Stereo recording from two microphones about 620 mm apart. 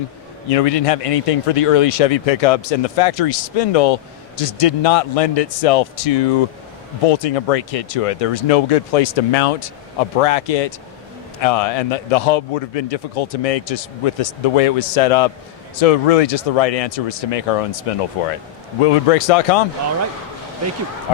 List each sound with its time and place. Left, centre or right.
0.5 s a man's voice: left